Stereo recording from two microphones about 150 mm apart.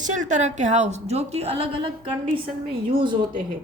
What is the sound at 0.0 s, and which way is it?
A woman's voice, 55° right (ahead or behind).